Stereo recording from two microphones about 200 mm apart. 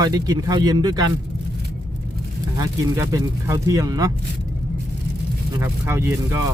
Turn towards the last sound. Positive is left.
turn(degrees=-15)  # may be behind; listen again after turning